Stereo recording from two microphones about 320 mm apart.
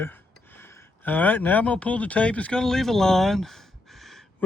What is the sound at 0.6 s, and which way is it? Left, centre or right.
Speech, centre.